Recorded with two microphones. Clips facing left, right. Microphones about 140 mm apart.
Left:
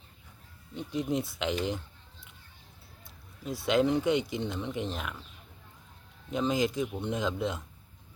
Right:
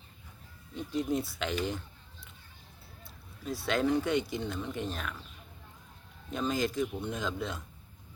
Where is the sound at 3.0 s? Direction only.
20° left (ahead or behind).